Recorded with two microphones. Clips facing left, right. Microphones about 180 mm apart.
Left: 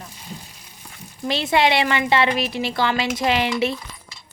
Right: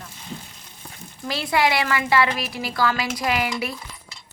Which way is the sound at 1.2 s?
25° left (ahead or behind).